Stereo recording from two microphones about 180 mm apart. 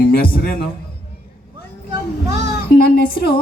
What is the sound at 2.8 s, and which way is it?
Music, 55° left (ahead or behind).